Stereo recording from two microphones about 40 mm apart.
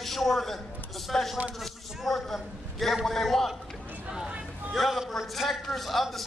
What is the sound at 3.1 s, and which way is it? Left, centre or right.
Speech, centre.